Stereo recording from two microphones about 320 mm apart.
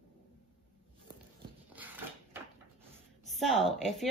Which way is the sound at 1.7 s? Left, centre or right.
Centre.